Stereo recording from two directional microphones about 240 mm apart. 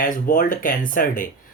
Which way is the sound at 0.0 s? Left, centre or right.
Left.